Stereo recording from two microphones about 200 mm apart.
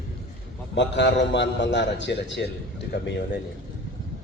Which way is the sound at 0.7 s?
60° left (ahead or behind).